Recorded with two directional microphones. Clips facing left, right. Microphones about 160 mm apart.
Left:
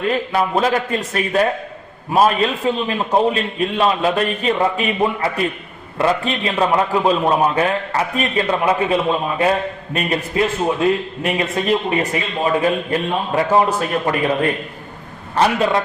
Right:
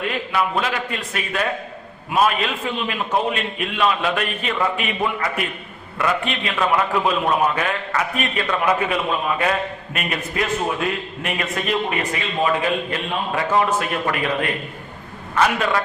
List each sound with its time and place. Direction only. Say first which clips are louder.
0.1 s a man's voice: left 5 dB; 40° left (ahead or behind)